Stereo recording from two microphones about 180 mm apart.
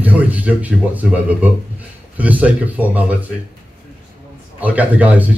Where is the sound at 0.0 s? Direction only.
10° right (ahead or behind).